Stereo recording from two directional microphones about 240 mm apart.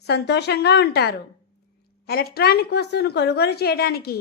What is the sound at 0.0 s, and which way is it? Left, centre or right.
A woman's voice, left.